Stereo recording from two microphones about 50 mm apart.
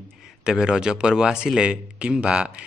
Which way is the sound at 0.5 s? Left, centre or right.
Centre.